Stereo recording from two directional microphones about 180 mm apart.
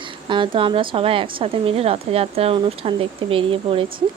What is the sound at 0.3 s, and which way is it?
A woman's voice, 25° right (ahead or behind).